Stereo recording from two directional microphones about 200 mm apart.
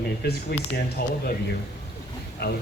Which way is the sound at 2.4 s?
55° left (ahead or behind).